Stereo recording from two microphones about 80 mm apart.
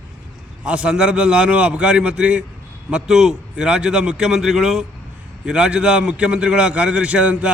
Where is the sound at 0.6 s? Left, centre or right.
Centre.